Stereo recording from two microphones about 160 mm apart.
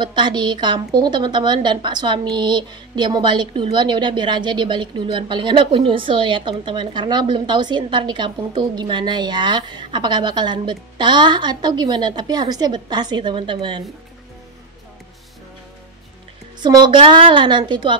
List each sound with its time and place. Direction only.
0.0 s a woman's voice: 30° right (ahead or behind)
16.6 s a woman's voice: 25° right (ahead or behind)